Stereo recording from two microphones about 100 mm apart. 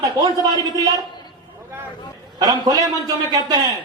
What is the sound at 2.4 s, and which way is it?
Speech, 40° right (ahead or behind).